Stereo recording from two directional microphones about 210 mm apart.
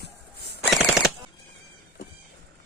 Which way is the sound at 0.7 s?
Centre (ahead or behind).